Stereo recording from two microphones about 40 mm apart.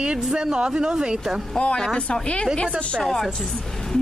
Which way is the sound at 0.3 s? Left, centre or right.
Centre.